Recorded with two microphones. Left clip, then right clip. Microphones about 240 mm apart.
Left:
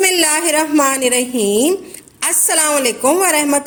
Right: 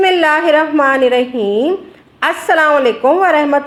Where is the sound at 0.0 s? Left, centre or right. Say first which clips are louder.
Right 4 dB; left.